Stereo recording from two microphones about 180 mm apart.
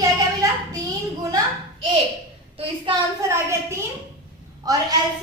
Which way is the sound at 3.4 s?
15° right (ahead or behind).